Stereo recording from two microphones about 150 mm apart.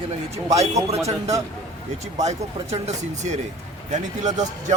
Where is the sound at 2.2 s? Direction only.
45° right (ahead or behind).